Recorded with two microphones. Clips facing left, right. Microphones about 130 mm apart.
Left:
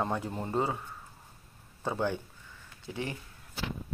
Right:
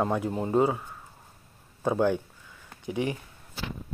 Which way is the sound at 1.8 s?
10° right (ahead or behind).